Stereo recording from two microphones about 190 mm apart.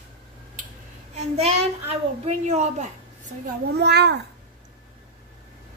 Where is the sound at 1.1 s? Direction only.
35° right (ahead or behind).